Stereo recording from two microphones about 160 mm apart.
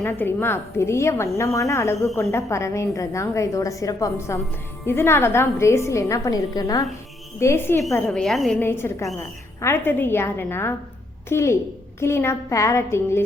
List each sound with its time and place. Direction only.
0.0 s a woman's voice: 15° left (ahead or behind)
8.0 s a woman's voice: 5° left (ahead or behind)
8.6 s a woman's voice: 15° left (ahead or behind)